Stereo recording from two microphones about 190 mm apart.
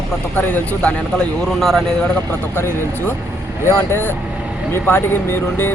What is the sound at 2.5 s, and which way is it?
Speech, 10° left (ahead or behind).